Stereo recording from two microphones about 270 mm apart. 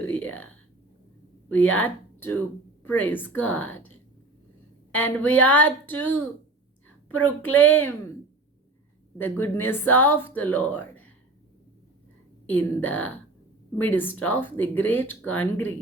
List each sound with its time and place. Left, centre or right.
0.0 s whispering: centre
1.7 s speech: centre
9.1 s speech: centre
12.5 s a woman's voice: centre